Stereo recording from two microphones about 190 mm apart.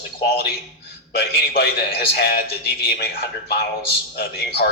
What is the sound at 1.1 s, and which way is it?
Speech, 55° left (ahead or behind).